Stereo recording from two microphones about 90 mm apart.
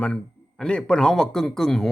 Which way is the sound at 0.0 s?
10° left (ahead or behind).